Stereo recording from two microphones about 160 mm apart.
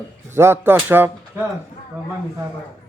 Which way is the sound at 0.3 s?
15° right (ahead or behind).